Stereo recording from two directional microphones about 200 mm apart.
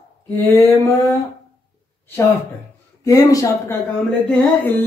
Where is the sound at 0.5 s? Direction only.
15° left (ahead or behind).